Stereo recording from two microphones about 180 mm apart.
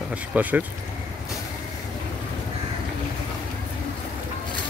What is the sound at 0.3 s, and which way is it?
Speech, 10° right (ahead or behind).